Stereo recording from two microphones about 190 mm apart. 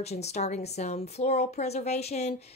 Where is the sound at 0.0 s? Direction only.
35° left (ahead or behind).